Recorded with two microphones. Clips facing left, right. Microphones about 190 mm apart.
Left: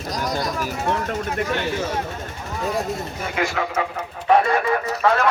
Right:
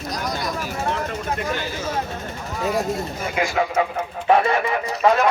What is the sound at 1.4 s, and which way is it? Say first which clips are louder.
Speech: left 3 dB; 65° left (ahead or behind).